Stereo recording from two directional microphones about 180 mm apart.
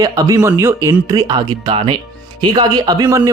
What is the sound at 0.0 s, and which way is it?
A man's voice, 20° right (ahead or behind).